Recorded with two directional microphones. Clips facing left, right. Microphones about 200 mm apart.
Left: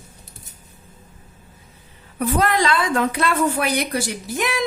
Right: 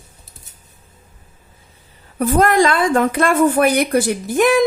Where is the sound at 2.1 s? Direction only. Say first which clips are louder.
Right 6 dB; 45° right (ahead or behind).